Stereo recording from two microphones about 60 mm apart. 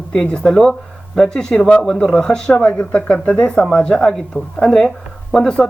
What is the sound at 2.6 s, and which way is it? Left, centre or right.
Speech, left.